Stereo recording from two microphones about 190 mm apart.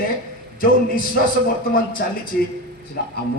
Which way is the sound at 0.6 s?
45° left (ahead or behind).